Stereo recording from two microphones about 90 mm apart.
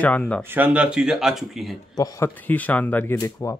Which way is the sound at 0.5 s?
15° right (ahead or behind).